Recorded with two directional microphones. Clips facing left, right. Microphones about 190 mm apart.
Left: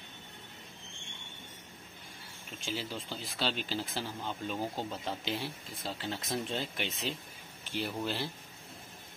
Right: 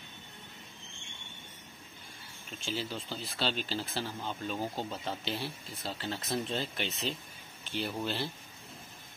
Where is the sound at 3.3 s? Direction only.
10° left (ahead or behind).